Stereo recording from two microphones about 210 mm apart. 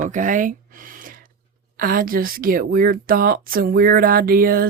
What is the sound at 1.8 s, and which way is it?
Speech, 45° right (ahead or behind).